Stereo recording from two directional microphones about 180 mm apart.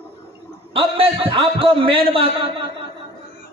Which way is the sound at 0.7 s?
30° right (ahead or behind).